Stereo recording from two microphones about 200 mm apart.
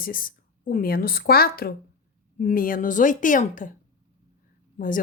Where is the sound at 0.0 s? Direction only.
45° left (ahead or behind).